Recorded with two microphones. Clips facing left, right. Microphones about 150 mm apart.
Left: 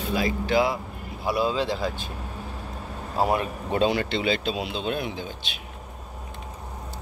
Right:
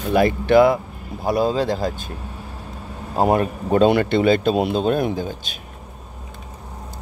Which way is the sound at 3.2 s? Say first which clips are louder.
Right 6 dB; 45° right (ahead or behind).